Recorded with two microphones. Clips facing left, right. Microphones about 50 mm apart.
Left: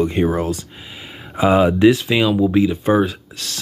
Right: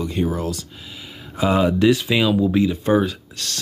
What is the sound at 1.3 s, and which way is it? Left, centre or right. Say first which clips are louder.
Speech: left 4 dB; centre.